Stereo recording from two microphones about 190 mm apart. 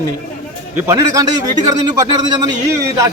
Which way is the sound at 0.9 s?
15° right (ahead or behind).